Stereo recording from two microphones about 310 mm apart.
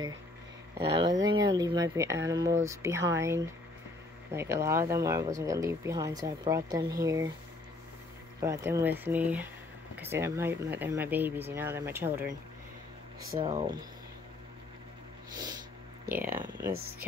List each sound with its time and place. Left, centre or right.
0.7 s speech: centre
8.4 s speech: centre
13.4 s speech: centre
16.2 s speech: centre